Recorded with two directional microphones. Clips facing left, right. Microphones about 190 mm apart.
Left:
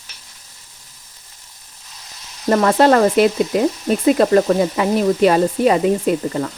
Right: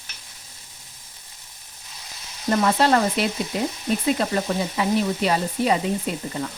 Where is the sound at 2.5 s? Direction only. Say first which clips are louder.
Left 6 dB; 65° left (ahead or behind).